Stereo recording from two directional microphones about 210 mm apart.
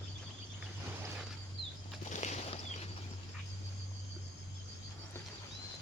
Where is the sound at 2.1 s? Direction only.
35° left (ahead or behind).